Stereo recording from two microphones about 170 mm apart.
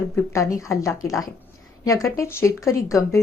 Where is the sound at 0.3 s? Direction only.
20° left (ahead or behind).